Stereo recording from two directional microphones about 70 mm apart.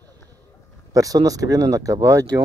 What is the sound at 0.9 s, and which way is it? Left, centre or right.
Speech, right.